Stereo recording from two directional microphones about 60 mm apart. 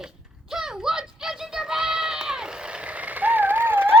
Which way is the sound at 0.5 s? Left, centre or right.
Centre.